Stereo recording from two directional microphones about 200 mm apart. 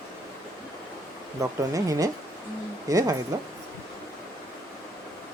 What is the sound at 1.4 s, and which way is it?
Speech, 15° right (ahead or behind).